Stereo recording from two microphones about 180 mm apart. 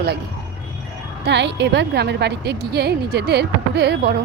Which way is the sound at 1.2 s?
75° right (ahead or behind).